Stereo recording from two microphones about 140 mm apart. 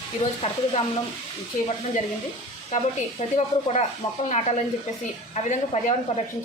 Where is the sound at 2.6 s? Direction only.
50° left (ahead or behind).